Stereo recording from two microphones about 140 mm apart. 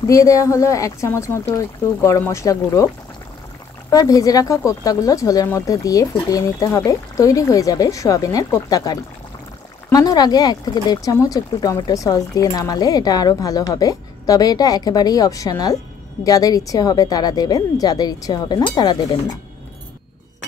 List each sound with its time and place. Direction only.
0.0 s speech: 25° left (ahead or behind)
3.9 s speech: 25° left (ahead or behind)